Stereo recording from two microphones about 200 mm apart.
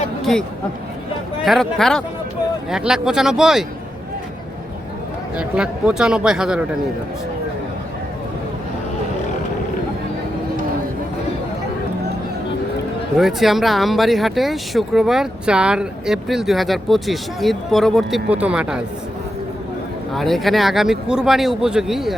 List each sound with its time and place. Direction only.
0.2 s speech: centre (ahead or behind)
1.5 s speech: centre (ahead or behind)
5.4 s speech: 5° right (ahead or behind)
13.1 s speech: centre (ahead or behind)
20.1 s speech: centre (ahead or behind)